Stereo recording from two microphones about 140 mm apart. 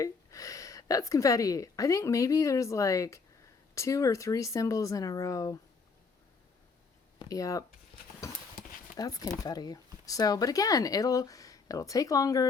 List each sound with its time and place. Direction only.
0.0 s speech: 25° left (ahead or behind)
7.2 s speech: 25° left (ahead or behind)
9.0 s speech: 25° left (ahead or behind)